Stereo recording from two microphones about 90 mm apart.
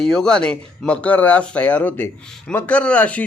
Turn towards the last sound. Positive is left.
turn(degrees=15)  # may be behind; listen again after turning